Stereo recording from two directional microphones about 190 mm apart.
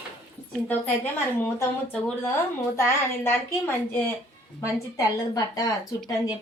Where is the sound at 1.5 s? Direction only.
10° left (ahead or behind).